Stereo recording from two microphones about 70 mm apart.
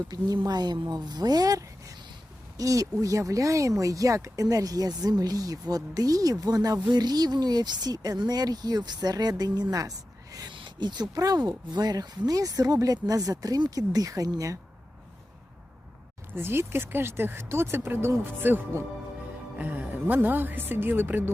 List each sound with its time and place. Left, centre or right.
0.1 s speech: right
6.8 s speech: right
10.3 s speech: right
16.3 s a woman's voice: right